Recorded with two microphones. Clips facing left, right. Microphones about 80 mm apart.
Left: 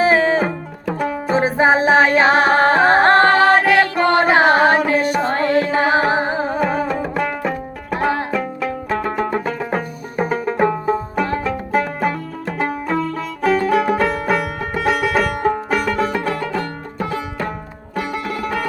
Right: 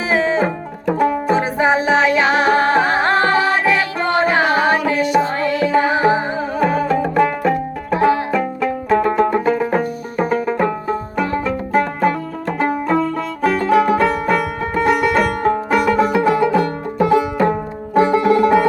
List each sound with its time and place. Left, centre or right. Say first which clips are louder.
0.0 s music: left 2 dB; left
0.4 s music: right 3 dB; centre
1.4 s music: left 1 dB; left
6.6 s music: right 3 dB; centre; by 18.6 s right